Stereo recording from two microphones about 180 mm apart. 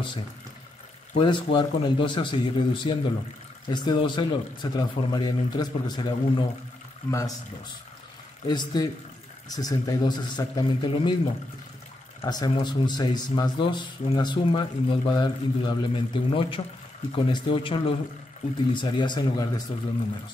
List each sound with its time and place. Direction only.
1.1 s speech: 25° left (ahead or behind)
8.5 s speech: 25° left (ahead or behind)
12.2 s speech: 20° left (ahead or behind)